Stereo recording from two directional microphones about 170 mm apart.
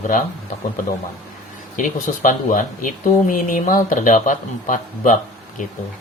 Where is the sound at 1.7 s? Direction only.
50° left (ahead or behind).